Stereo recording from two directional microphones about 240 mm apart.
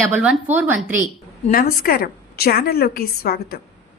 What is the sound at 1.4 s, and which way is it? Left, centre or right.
A woman's voice, left.